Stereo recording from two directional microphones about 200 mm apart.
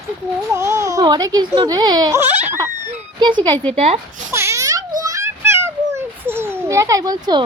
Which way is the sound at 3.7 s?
35° right (ahead or behind).